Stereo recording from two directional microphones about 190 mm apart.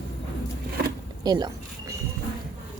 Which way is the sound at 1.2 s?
20° right (ahead or behind).